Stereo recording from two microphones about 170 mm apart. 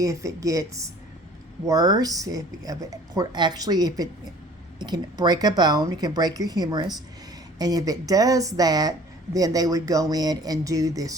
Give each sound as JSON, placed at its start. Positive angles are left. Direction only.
{"t": 0.0, "sound": "speech", "side_deg": -20}